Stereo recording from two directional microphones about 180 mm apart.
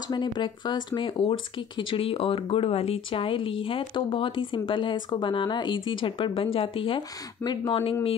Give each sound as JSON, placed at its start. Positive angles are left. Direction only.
{"t": 0.1, "sound": "speech", "side_deg": 25}